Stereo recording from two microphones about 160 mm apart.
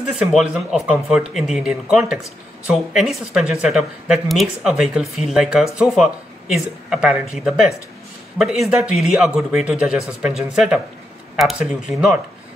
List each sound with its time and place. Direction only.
0.3 s speech: 5° right (ahead or behind)